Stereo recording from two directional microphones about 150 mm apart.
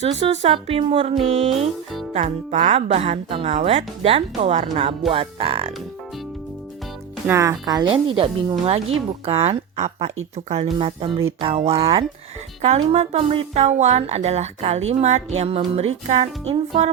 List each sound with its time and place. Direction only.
0.0 s speech: 45° right (ahead or behind)
2.1 s a woman's voice: 50° right (ahead or behind)
7.3 s speech: 20° right (ahead or behind)
7.7 s a woman's voice: 30° right (ahead or behind)
11.8 s speech: 30° right (ahead or behind)
12.6 s speech: 45° right (ahead or behind)